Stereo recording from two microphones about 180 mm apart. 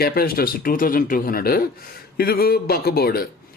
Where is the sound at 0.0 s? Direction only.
55° left (ahead or behind).